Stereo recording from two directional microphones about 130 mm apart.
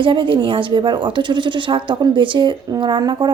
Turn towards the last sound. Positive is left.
turn(degrees=-35)  # may be behind; listen again after turning